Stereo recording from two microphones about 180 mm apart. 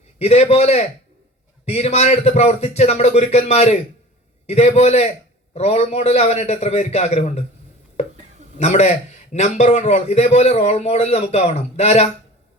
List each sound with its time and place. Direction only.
0.2 s a man's voice: 35° left (ahead or behind)
8.5 s a man's voice: 40° left (ahead or behind)